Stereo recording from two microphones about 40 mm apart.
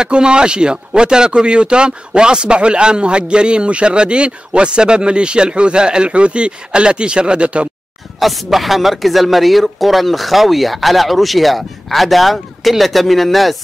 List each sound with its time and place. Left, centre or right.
0.0 s a man's voice: right
8.2 s speech: centre